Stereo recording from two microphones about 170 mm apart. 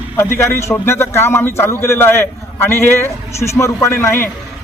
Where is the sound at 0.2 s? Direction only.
15° left (ahead or behind).